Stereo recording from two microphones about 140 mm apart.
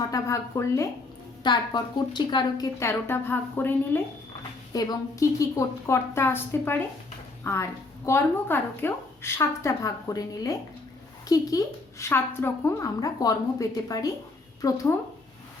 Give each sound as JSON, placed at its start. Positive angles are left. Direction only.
{"t": 0.1, "sound": "speech", "side_deg": 20}
{"t": 1.5, "sound": "a woman's voice", "side_deg": 35}
{"t": 2.7, "sound": "a woman's voice", "side_deg": 20}
{"t": 4.7, "sound": "speech", "side_deg": 25}